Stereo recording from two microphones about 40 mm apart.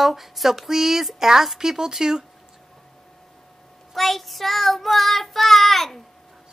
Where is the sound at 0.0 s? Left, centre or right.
Centre.